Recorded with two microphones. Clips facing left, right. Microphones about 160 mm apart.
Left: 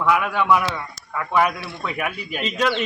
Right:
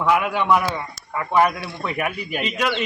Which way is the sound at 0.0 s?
20° right (ahead or behind).